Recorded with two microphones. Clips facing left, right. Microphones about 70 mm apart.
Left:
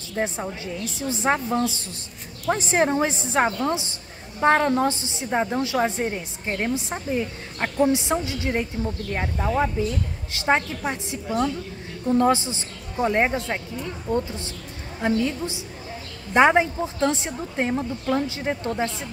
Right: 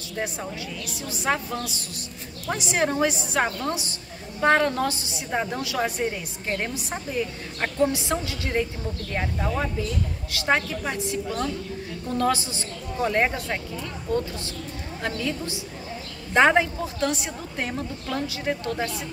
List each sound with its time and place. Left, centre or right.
0.2 s a woman's voice: centre